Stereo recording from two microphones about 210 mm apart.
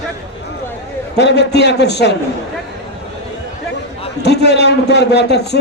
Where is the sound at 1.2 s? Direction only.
55° left (ahead or behind).